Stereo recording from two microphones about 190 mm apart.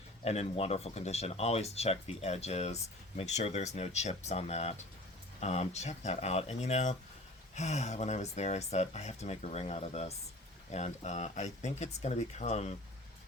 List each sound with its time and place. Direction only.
0.3 s speech: 35° left (ahead or behind)